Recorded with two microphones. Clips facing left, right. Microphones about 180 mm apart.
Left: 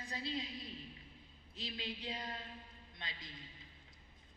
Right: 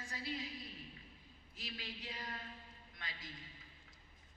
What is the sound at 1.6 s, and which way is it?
Speech, 25° left (ahead or behind).